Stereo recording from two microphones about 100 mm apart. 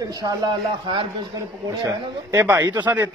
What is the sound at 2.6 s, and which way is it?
Speech, 45° right (ahead or behind).